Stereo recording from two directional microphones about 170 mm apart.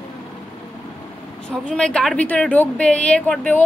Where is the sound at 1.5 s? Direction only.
5° left (ahead or behind).